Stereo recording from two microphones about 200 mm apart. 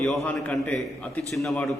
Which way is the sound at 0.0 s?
Centre (ahead or behind).